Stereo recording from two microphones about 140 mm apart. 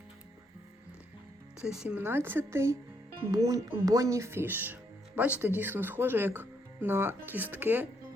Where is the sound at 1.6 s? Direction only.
5° right (ahead or behind).